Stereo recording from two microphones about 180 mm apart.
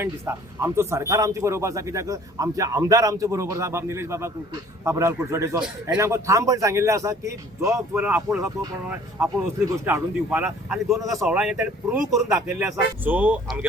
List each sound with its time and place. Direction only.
0.0 s speech: 15° right (ahead or behind)